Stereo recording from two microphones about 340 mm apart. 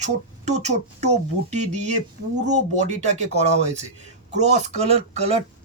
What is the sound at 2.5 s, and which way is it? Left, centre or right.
Speech, centre.